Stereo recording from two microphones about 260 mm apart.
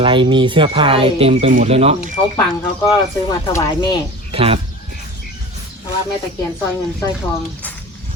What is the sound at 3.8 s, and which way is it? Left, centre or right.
Speech, centre.